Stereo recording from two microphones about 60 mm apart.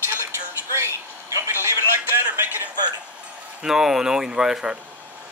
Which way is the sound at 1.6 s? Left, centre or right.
Right.